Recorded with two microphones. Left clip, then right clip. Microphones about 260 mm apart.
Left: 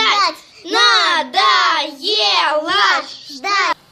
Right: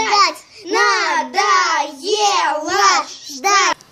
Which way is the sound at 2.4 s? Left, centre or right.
Centre.